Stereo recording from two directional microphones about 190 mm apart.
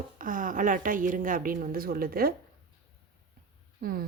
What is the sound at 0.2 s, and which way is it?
A woman's voice, 45° right (ahead or behind).